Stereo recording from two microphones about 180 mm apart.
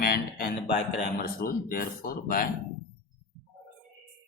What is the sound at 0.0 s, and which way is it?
Music, 55° left (ahead or behind).